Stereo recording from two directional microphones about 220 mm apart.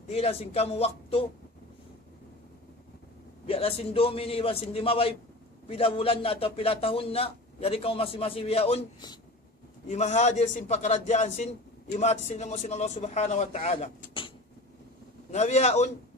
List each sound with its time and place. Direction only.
0.1 s a man's voice: 30° left (ahead or behind)
3.4 s a man's voice: 25° left (ahead or behind)